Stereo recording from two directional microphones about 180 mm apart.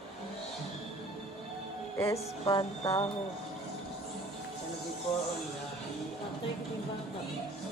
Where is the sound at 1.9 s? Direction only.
15° left (ahead or behind).